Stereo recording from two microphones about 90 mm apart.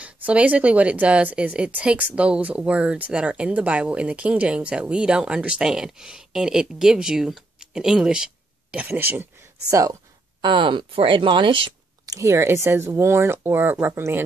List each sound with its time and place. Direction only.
0.0 s a woman's voice: 15° right (ahead or behind)
8.7 s speech: 20° right (ahead or behind)
9.7 s speech: 40° right (ahead or behind)
10.4 s speech: 65° right (ahead or behind)
12.1 s speech: 35° right (ahead or behind)